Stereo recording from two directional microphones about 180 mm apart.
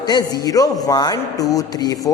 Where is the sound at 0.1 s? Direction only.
20° left (ahead or behind).